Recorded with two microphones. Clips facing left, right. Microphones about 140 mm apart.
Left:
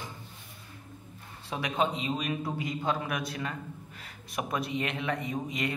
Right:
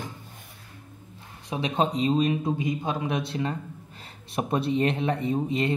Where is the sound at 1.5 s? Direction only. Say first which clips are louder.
Right 4 dB; 25° right (ahead or behind).